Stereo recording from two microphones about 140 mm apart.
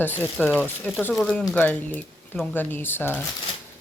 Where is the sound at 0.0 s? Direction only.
15° left (ahead or behind).